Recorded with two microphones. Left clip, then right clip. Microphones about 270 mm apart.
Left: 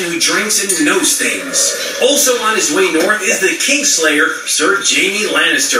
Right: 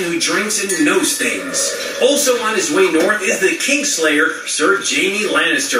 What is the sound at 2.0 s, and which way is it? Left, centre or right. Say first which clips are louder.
Speech: left 2 dB; centre.